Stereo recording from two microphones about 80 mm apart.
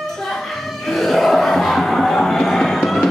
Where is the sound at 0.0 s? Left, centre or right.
Centre.